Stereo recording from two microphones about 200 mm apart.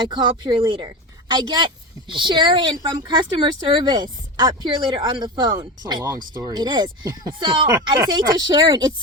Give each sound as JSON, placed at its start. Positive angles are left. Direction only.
{"t": 0.0, "sound": "speech", "side_deg": -25}